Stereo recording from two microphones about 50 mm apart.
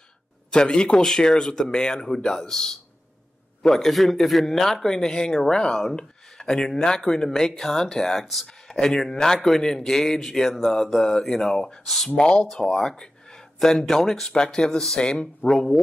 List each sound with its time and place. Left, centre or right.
0.5 s a man's voice: centre
8.5 s a man's voice: centre
12.2 s a man's voice: left